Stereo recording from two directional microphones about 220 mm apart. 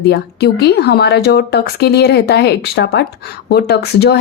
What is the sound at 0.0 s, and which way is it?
Speech, 50° left (ahead or behind).